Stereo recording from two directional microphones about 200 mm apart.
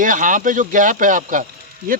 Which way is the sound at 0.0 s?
40° right (ahead or behind).